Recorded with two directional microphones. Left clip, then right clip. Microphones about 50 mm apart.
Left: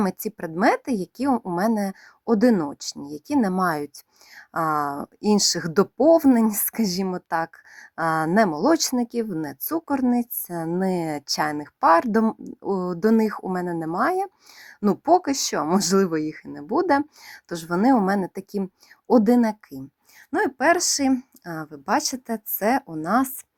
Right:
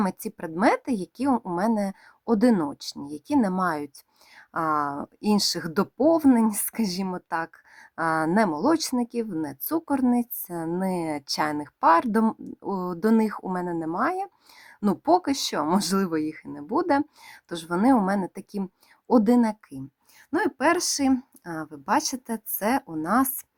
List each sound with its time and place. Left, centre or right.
0.0 s a woman's voice: left
7.3 s speech: left
7.8 s a sound: left
8.5 s speech: left
9.6 s speech: left
10.8 s a woman's voice: left
11.3 s speech: left
13.9 s speech: left
14.8 s a woman's voice: left